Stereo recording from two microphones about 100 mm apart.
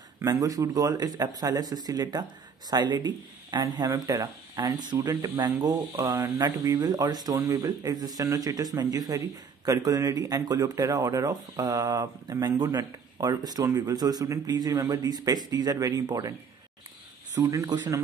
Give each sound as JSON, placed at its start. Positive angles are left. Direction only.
{"t": 0.2, "sound": "speech", "side_deg": -35}
{"t": 5.9, "sound": "speech", "side_deg": -30}
{"t": 17.4, "sound": "speech", "side_deg": -35}
{"t": 17.6, "sound": "speech", "side_deg": -45}